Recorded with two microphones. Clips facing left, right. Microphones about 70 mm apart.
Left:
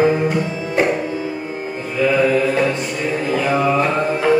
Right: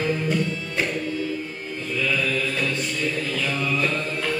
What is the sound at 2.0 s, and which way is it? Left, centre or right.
Music, left.